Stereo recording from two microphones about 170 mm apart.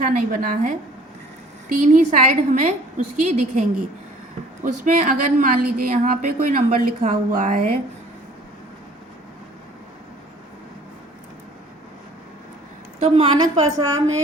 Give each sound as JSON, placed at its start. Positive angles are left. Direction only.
{"t": 0.0, "sound": "speech", "side_deg": -50}
{"t": 1.8, "sound": "speech", "side_deg": -45}
{"t": 4.8, "sound": "speech", "side_deg": -50}
{"t": 13.0, "sound": "a woman's voice", "side_deg": -35}